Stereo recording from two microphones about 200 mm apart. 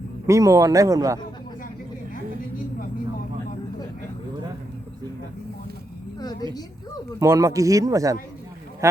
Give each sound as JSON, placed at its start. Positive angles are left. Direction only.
{"t": 0.3, "sound": "a man's voice", "side_deg": -15}
{"t": 7.2, "sound": "a man's voice", "side_deg": -15}